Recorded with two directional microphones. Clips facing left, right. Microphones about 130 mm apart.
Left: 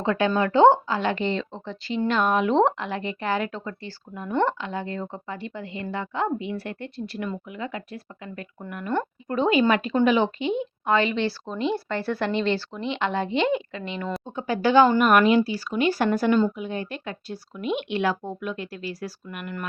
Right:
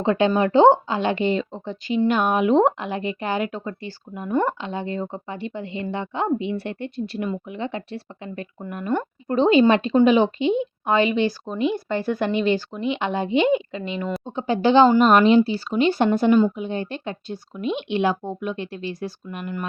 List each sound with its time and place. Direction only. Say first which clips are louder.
0.0 s a woman's voice: right 3 dB; 20° right (ahead or behind)